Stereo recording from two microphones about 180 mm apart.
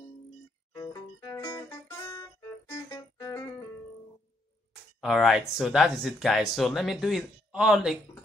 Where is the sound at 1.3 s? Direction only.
20° left (ahead or behind).